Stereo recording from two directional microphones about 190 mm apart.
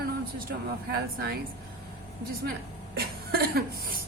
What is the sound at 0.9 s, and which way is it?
Speech, 55° right (ahead or behind).